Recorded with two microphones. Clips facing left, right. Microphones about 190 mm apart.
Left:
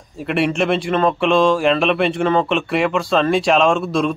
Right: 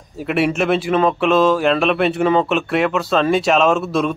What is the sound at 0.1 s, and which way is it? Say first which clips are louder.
Speech: right 1 dB; 5° right (ahead or behind).